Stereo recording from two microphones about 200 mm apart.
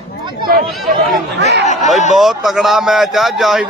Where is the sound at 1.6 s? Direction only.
35° left (ahead or behind).